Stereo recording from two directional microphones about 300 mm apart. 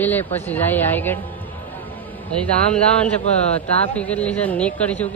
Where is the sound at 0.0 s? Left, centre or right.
Centre.